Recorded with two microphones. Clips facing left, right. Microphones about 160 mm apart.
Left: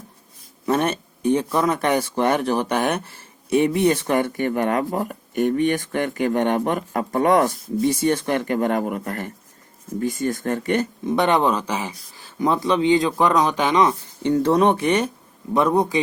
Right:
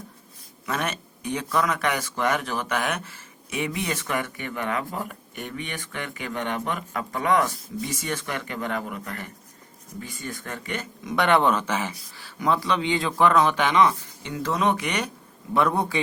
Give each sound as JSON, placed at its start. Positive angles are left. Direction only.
{"t": 0.6, "sound": "speech", "side_deg": 30}
{"t": 11.1, "sound": "speech", "side_deg": 20}
{"t": 14.3, "sound": "speech", "side_deg": 35}